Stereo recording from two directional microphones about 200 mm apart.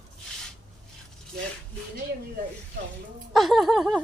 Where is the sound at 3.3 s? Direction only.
Centre (ahead or behind).